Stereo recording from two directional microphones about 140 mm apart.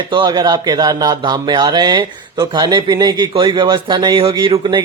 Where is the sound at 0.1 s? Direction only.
35° right (ahead or behind).